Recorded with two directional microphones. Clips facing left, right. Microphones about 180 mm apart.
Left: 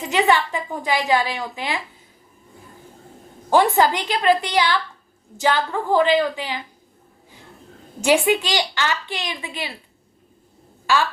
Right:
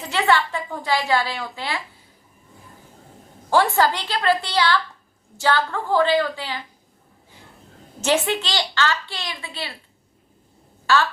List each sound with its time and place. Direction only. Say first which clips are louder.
0.0 s a woman's voice: left 2 dB; 15° left (ahead or behind)
3.5 s a woman's voice: left 2 dB; 15° left (ahead or behind)
8.0 s a woman's voice: left 4 dB; 15° left (ahead or behind)